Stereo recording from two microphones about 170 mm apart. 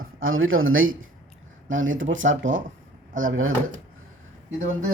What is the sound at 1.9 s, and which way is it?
Speech, 90° right.